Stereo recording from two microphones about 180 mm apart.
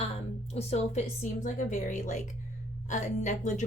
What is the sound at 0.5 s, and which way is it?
A woman's voice, 35° left (ahead or behind).